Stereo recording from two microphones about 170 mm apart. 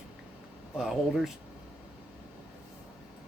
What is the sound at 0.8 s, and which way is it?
Speech, 5° right (ahead or behind).